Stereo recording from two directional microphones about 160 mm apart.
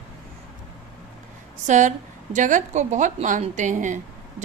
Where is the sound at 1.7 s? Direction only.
50° right (ahead or behind).